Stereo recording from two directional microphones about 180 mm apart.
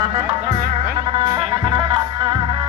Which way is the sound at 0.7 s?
25° right (ahead or behind).